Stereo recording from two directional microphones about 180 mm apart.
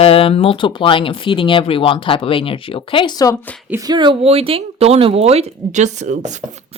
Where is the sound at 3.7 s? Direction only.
20° right (ahead or behind); by 6.3 s 40° right (ahead or behind).